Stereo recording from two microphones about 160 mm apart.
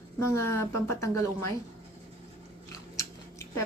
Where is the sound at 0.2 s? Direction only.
15° left (ahead or behind).